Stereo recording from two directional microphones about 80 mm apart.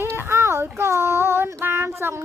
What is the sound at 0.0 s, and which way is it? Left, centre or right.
Child singing, right.